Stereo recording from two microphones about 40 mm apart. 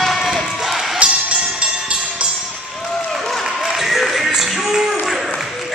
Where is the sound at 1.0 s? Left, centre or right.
Right.